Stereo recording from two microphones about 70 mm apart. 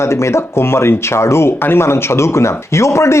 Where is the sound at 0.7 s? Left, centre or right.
Left.